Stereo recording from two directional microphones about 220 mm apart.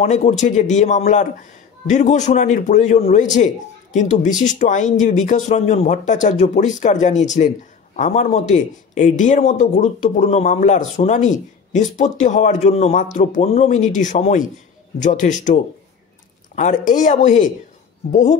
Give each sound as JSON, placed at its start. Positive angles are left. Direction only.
{"t": 0.0, "sound": "a man's voice", "side_deg": 30}